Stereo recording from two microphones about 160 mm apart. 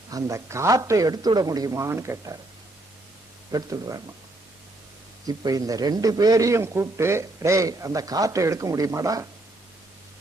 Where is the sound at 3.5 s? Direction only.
25° right (ahead or behind).